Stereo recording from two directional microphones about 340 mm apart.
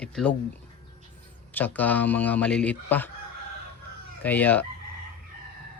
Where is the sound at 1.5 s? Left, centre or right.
Centre.